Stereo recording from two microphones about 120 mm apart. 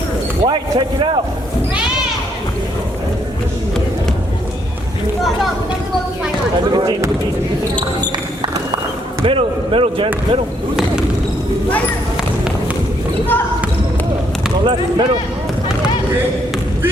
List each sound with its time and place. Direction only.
0.4 s speech: 40° right (ahead or behind)
6.7 s speech: 30° right (ahead or behind)
9.2 s basketball bounce: 50° right (ahead or behind)
14.6 s speech: 45° right (ahead or behind)